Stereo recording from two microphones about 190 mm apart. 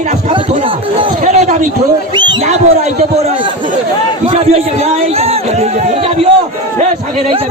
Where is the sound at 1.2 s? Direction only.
40° right (ahead or behind).